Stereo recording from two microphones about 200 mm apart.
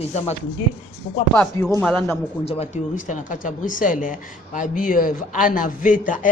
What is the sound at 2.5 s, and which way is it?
A woman's voice, 35° left (ahead or behind).